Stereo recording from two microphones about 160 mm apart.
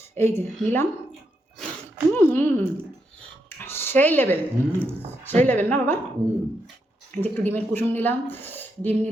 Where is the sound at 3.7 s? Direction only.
15° left (ahead or behind).